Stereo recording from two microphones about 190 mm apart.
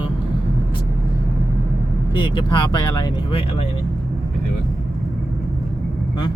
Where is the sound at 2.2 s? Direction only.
25° left (ahead or behind).